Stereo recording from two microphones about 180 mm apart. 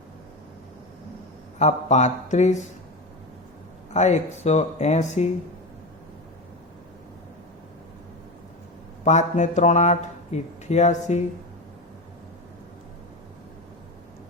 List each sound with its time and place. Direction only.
1.5 s speech: 40° left (ahead or behind)
3.9 s speech: 40° left (ahead or behind)
9.0 s speech: 40° left (ahead or behind)